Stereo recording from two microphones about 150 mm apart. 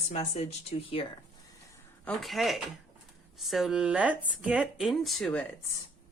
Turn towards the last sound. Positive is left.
turn(degrees=5)  # may be behind; listen again after turning